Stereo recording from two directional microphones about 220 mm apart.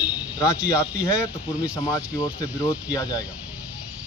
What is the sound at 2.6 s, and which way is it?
Speech, 15° left (ahead or behind).